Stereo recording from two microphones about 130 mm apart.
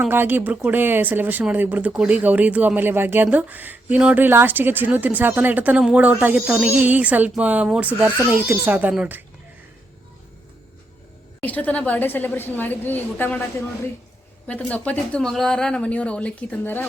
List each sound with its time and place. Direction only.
0.0 s speech: 15° right (ahead or behind)
11.3 s a woman's voice: 15° left (ahead or behind)
14.4 s a woman's voice: 10° left (ahead or behind)